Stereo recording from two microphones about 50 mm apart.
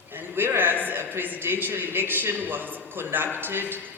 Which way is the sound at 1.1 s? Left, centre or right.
Right.